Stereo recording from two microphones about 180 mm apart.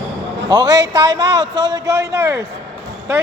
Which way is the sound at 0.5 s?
20° right (ahead or behind).